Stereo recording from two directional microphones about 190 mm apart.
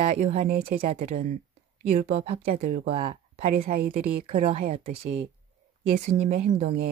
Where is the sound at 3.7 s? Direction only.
50° right (ahead or behind).